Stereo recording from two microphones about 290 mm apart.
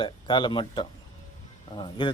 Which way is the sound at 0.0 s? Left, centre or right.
Centre.